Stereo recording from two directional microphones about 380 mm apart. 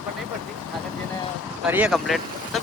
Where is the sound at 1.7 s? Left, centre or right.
Centre.